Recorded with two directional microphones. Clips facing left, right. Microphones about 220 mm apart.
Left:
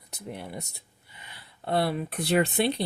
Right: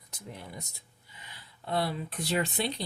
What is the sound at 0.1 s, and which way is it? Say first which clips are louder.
Speech: left 6 dB; 60° left (ahead or behind).